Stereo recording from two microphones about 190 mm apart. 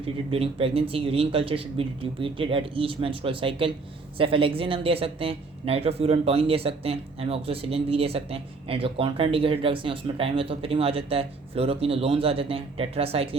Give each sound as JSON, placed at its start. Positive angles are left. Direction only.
{"t": 0.0, "sound": "speech", "side_deg": -30}